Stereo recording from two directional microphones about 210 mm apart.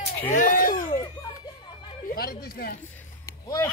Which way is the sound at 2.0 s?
45° left (ahead or behind).